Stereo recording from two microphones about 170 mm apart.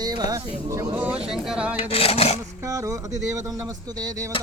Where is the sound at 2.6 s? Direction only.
20° right (ahead or behind).